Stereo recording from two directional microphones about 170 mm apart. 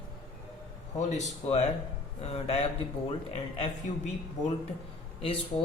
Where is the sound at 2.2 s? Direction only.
35° left (ahead or behind).